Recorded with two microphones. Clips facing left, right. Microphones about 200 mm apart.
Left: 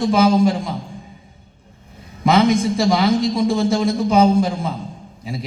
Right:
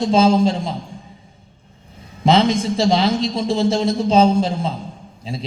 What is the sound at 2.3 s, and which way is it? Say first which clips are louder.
A man's voice: left 1 dB; 25° right (ahead or behind).